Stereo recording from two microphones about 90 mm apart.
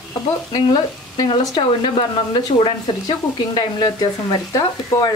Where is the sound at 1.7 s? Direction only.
70° left (ahead or behind).